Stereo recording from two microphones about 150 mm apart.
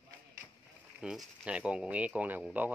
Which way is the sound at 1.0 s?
Centre (ahead or behind).